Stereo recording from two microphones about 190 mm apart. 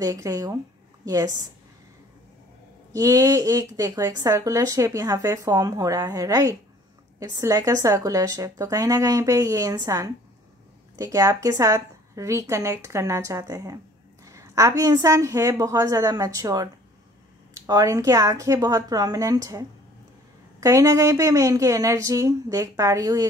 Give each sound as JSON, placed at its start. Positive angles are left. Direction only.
{"t": 0.0, "sound": "a woman's voice", "side_deg": -20}
{"t": 2.9, "sound": "speech", "side_deg": -20}
{"t": 17.6, "sound": "speech", "side_deg": -20}
{"t": 20.6, "sound": "speech", "side_deg": -15}